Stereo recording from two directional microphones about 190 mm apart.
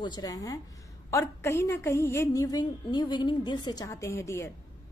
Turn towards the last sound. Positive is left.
turn(degrees=15)  # may be behind; listen again after turning